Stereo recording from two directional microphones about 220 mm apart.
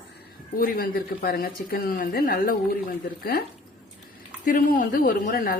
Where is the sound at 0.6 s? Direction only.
40° left (ahead or behind).